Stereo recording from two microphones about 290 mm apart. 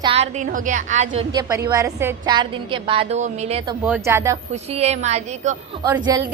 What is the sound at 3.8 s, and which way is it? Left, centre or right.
Speech, centre.